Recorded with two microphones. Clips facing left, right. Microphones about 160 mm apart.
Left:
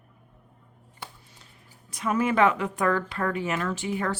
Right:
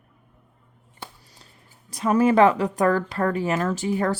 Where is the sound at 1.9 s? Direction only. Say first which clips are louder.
Right 6 dB; 35° right (ahead or behind).